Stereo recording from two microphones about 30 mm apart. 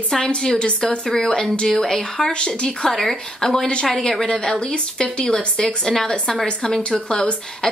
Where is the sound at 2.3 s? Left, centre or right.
Left.